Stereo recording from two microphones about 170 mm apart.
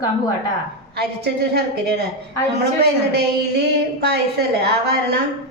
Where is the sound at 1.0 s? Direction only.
70° right (ahead or behind).